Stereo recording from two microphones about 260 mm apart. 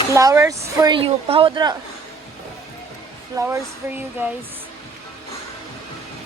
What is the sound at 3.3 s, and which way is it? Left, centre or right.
A woman's voice, centre.